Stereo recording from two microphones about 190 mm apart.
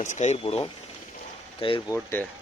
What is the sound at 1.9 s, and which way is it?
Speech, 10° left (ahead or behind).